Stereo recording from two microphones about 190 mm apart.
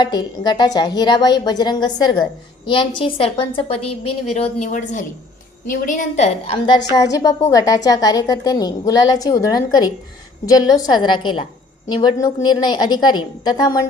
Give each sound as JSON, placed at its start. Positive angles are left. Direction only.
{"t": 0.0, "sound": "a woman's voice", "side_deg": 20}